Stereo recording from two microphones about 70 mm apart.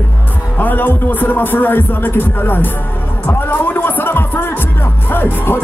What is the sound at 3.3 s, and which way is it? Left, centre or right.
Music, left.